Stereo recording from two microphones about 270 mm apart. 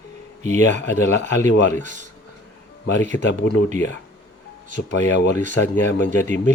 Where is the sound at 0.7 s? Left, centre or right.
Left.